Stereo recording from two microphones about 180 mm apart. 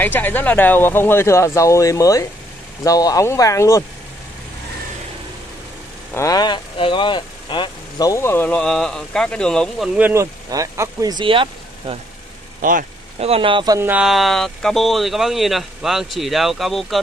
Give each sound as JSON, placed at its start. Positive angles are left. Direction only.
{"t": 0.0, "sound": "speech", "side_deg": 10}
{"t": 6.1, "sound": "speech", "side_deg": 20}
{"t": 9.9, "sound": "speech", "side_deg": -10}
{"t": 13.2, "sound": "speech", "side_deg": -30}
{"t": 13.7, "sound": "speech", "side_deg": -10}